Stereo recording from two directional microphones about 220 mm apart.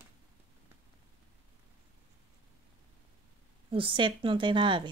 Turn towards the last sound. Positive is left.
turn(degrees=-20)  # may be behind; listen again after turning